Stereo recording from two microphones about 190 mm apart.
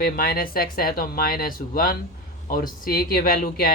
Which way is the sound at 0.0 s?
50° left (ahead or behind).